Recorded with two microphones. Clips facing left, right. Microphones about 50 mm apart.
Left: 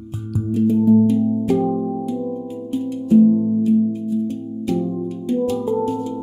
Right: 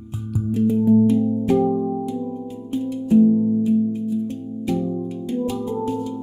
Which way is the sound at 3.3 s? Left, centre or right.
Centre.